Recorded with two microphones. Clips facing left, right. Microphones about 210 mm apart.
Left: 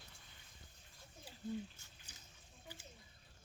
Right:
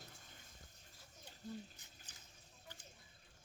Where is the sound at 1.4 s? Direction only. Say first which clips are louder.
Left 5 dB; 40° right (ahead or behind).